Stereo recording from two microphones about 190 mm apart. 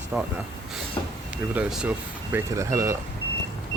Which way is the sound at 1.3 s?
5° right (ahead or behind).